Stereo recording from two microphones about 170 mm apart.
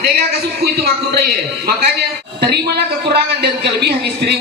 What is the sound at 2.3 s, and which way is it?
A man's voice, 70° right (ahead or behind).